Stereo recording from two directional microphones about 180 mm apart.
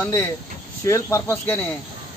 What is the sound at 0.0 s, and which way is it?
A man's voice, 15° left (ahead or behind).